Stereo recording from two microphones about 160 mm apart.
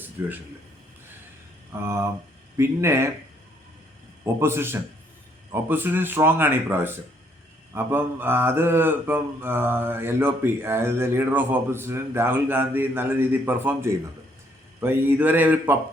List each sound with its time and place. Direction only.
0.2 s mantra: 15° right (ahead or behind)
1.8 s mantra: 15° right (ahead or behind)
4.2 s mantra: 15° right (ahead or behind)